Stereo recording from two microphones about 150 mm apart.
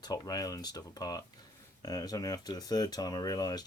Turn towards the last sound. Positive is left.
turn(degrees=25)  # may be behind; listen again after turning